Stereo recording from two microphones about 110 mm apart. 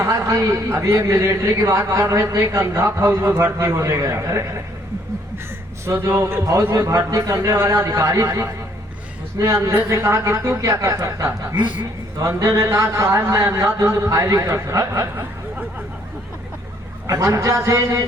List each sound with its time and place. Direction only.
0.0 s a man's voice: 25° right (ahead or behind)
5.8 s a man's voice: 25° right (ahead or behind)
12.4 s a man's voice: 25° right (ahead or behind)
17.1 s a man's voice: 30° right (ahead or behind)